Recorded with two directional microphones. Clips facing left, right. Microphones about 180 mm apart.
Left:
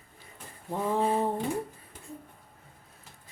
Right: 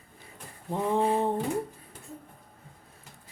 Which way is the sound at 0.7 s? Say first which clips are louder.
Right 1 dB; 20° right (ahead or behind).